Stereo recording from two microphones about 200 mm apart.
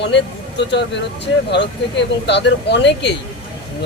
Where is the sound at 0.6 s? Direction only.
60° left (ahead or behind).